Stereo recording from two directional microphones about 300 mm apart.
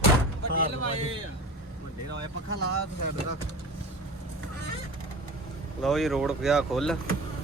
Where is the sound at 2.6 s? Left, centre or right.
Right.